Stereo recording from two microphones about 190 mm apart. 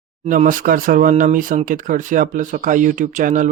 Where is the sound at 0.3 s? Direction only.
45° right (ahead or behind).